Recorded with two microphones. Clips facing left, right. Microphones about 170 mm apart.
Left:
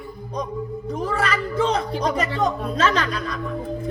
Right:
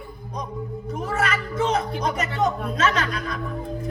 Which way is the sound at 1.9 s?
30° left (ahead or behind).